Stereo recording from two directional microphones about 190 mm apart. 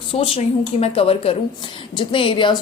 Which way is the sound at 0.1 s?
30° left (ahead or behind).